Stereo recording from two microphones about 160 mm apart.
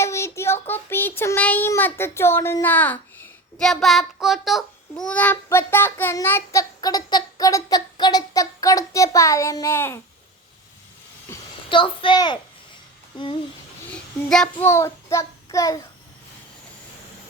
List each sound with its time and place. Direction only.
0.0 s child singing: 15° left (ahead or behind)
0.7 s a child's voice: 15° left (ahead or behind)
11.3 s a sound: 15° left (ahead or behind)
11.7 s a woman's voice: 30° left (ahead or behind)
13.9 s a child's voice: 5° left (ahead or behind)
14.6 s child singing: 15° left (ahead or behind)